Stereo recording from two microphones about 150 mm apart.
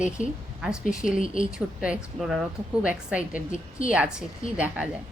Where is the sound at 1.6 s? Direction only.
5° right (ahead or behind).